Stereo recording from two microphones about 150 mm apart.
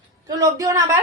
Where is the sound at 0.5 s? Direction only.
20° right (ahead or behind).